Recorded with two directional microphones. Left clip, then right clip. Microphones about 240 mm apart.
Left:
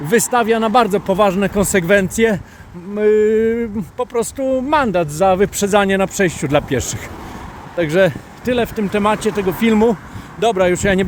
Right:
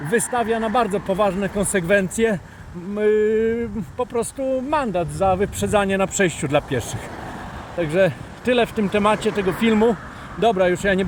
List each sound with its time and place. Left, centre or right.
0.1 s speech: left
8.4 s speech: centre